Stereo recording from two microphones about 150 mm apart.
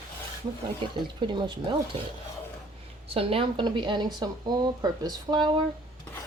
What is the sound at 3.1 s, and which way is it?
A woman's voice, 40° right (ahead or behind).